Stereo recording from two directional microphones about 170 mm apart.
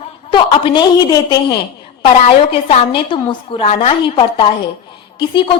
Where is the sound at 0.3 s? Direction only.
30° left (ahead or behind).